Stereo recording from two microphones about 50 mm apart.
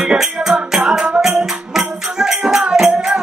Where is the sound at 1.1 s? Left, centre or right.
Centre.